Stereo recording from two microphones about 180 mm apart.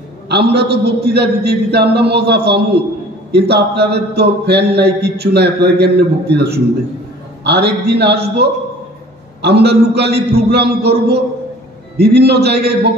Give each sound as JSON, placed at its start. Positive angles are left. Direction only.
{"t": 0.3, "sound": "a man's voice", "side_deg": -65}